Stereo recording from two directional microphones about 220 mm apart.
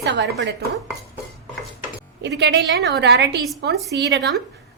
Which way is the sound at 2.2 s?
50° right (ahead or behind).